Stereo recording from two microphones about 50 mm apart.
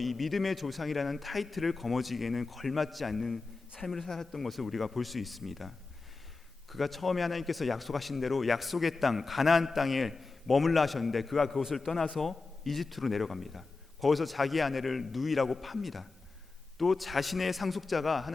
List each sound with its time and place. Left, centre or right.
0.0 s a man's voice: centre